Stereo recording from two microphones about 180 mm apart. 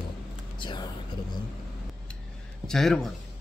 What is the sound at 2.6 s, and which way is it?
Speech, centre (ahead or behind).